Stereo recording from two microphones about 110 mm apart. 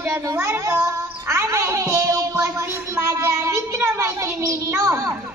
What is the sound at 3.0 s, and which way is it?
Child singing, 25° right (ahead or behind).